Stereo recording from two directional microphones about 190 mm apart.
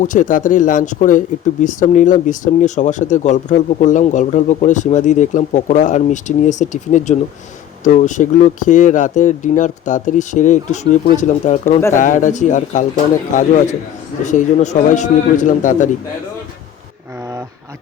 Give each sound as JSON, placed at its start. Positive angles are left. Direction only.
{"t": 0.0, "sound": "a man's voice", "side_deg": 45}